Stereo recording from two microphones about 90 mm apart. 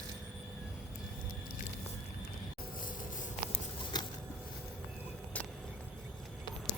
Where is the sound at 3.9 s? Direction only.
50° left (ahead or behind).